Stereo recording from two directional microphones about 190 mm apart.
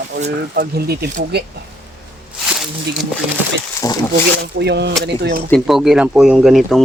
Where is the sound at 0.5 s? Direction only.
55° right (ahead or behind).